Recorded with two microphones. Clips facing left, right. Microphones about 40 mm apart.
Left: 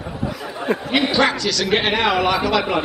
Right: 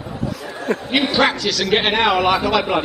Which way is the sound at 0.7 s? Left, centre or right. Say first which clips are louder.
Even; centre.